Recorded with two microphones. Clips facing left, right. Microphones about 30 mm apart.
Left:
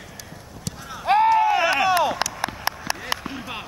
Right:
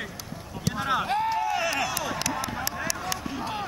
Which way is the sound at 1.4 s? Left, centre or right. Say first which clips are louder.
Left 7 dB; left.